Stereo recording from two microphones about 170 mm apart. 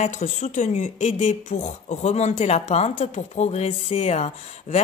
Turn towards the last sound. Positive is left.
turn(degrees=40)  # may be behind; listen again after turning